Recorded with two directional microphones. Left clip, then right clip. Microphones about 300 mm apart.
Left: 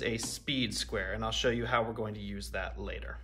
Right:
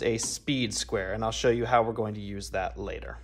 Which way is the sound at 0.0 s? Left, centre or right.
Centre.